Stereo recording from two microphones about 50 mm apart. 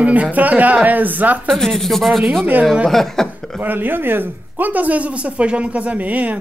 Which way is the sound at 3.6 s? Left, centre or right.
Right.